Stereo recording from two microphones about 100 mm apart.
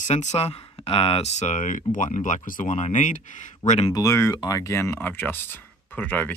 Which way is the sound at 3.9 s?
30° left (ahead or behind).